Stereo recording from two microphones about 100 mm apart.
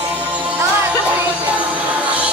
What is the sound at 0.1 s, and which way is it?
Music, 15° right (ahead or behind).